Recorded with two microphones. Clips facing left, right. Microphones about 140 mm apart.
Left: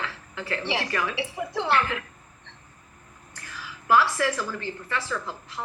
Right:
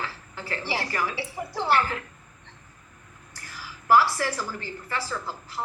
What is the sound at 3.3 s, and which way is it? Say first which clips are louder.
A woman's voice: left 1 dB; 35° right (ahead or behind).